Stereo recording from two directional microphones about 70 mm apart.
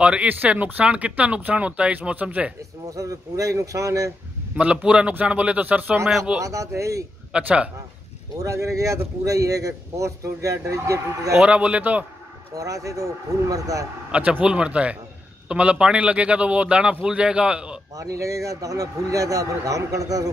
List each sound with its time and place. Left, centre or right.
0.0 s speech: centre
2.9 s a man's voice: right
4.6 s speech: centre
6.0 s speech: centre
6.4 s a man's voice: right
7.3 s speech: centre
8.4 s a man's voice: right
11.3 s speech: centre
12.5 s speech: right
14.1 s speech: centre
17.9 s a man's voice: right